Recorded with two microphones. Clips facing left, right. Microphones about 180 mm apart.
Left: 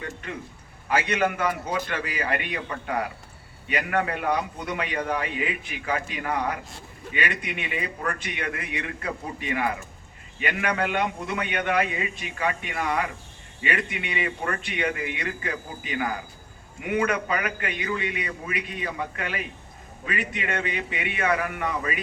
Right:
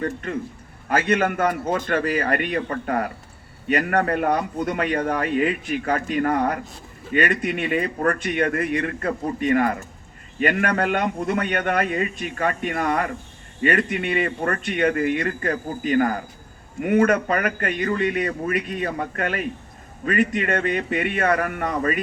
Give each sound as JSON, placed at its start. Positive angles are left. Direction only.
{"t": 0.0, "sound": "a man's voice", "side_deg": -45}